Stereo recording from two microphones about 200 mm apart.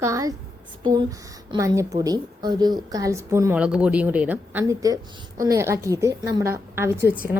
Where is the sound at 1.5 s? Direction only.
15° right (ahead or behind).